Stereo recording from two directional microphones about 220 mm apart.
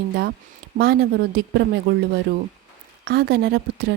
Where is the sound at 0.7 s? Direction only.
45° right (ahead or behind).